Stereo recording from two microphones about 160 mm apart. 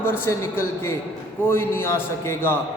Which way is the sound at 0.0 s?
15° left (ahead or behind).